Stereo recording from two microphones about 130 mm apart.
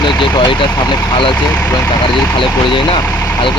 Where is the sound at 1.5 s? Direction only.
10° left (ahead or behind).